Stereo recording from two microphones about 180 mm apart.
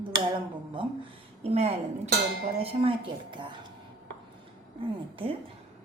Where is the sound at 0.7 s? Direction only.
30° right (ahead or behind).